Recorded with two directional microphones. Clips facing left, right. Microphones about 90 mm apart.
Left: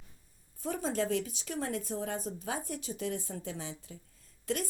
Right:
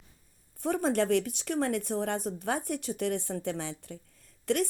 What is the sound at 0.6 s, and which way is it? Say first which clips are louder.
Speech: right 5 dB; 55° right (ahead or behind).